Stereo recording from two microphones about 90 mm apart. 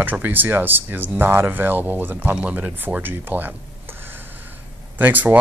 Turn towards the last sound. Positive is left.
turn(degrees=-20)  # may be behind; listen again after turning